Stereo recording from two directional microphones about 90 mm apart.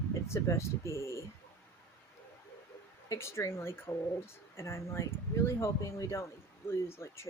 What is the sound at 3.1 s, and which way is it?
Speech, 30° left (ahead or behind).